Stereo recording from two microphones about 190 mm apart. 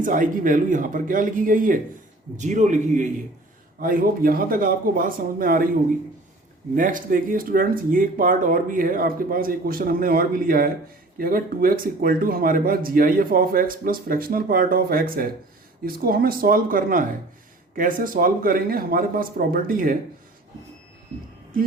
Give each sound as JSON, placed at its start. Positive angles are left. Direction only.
{"t": 0.0, "sound": "a man's voice", "side_deg": -45}
{"t": 6.7, "sound": "speech", "side_deg": -45}